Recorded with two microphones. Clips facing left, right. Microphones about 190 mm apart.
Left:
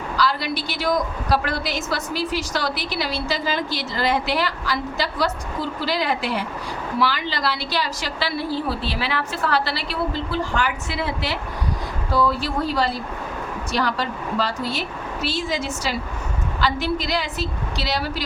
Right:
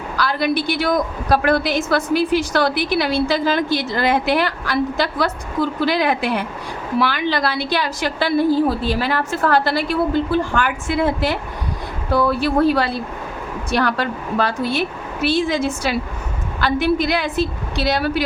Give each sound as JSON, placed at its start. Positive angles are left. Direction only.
{"t": 0.2, "sound": "a woman's voice", "side_deg": -55}